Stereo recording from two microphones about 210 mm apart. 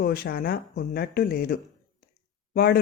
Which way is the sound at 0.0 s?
45° left (ahead or behind).